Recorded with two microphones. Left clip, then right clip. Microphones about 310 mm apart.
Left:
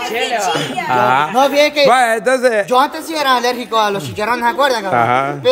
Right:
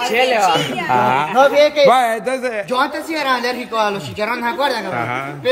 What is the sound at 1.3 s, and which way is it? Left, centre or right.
Speech, left.